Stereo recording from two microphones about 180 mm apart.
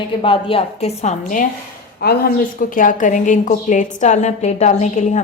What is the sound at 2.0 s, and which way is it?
A woman's voice, 60° left (ahead or behind).